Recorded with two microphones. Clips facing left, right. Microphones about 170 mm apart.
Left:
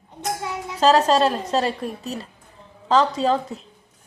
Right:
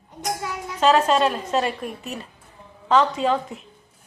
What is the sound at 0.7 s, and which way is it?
A woman's voice, 35° left (ahead or behind).